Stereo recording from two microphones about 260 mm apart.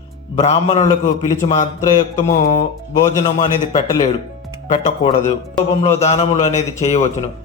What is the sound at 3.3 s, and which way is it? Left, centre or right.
A man's voice, centre.